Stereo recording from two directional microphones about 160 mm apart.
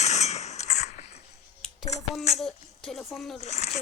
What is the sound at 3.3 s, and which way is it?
Speech, 45° left (ahead or behind).